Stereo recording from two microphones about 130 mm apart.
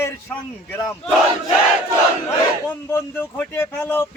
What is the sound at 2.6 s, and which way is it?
A man's voice, 20° left (ahead or behind).